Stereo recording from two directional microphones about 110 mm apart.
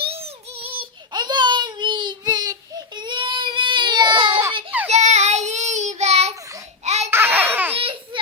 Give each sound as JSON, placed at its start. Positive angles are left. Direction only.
{"t": 0.0, "sound": "a sound", "side_deg": -65}
{"t": 4.0, "sound": "baby cry", "side_deg": -30}
{"t": 4.9, "sound": "child singing", "side_deg": -90}
{"t": 6.8, "sound": "babbling", "side_deg": -85}
{"t": 7.1, "sound": "baby laughter", "side_deg": -20}
{"t": 7.8, "sound": "babbling", "side_deg": -55}